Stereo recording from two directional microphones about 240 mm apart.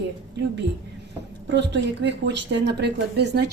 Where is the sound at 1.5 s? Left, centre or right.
Right.